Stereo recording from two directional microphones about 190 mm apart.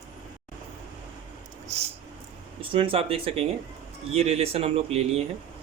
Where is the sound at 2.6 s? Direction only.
30° right (ahead or behind).